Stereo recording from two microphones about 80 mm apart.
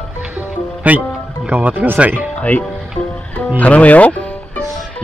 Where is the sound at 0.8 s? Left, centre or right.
Centre.